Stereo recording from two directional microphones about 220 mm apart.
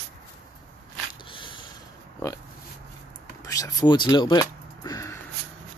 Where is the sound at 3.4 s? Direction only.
15° left (ahead or behind).